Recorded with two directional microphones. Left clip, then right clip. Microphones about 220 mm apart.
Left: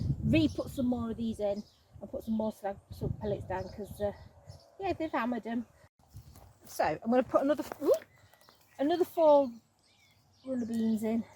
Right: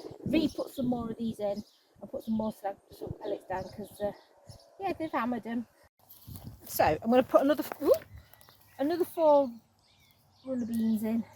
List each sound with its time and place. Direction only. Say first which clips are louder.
0.3 s a woman's voice: even; 15° right (ahead or behind)
6.7 s speech: right 4 dB; 45° right (ahead or behind)
7.7 s a woman's voice: right 2 dB; 20° right (ahead or behind)
10.5 s a woman's voice: right 1 dB; 10° right (ahead or behind)